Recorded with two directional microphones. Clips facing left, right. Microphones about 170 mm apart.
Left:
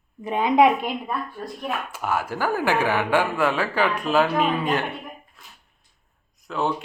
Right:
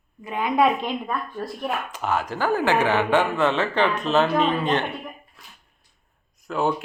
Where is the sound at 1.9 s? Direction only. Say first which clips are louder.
Right 1 dB; 10° left (ahead or behind).